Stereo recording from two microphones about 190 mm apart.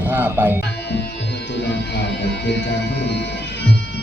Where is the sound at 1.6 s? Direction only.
60° left (ahead or behind).